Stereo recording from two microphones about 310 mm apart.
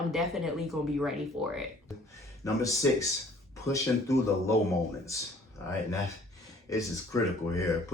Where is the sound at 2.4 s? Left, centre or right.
Centre.